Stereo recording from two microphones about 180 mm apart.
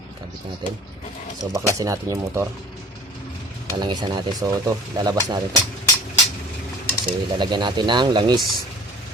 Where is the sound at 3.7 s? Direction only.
25° right (ahead or behind).